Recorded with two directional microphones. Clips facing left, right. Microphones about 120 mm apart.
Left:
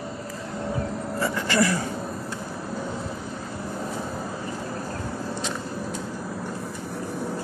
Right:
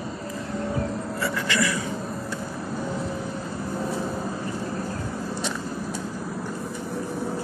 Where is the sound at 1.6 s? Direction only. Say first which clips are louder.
Left 5 dB; 55° left (ahead or behind).